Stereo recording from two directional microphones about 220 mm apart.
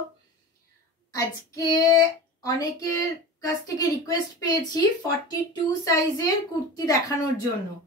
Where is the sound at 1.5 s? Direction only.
15° left (ahead or behind).